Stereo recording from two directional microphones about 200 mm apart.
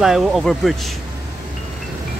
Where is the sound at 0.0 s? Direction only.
Centre (ahead or behind).